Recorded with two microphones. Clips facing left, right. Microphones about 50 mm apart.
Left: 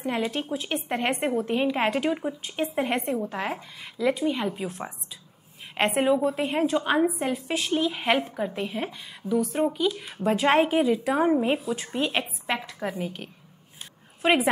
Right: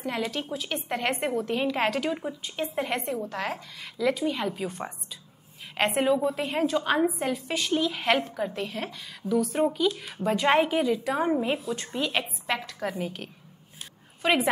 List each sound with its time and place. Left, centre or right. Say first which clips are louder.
0.0 s a woman's voice: left 2 dB; centre
7.1 s a woman's voice: left 1 dB; centre
14.2 s a woman's voice: left 2 dB; centre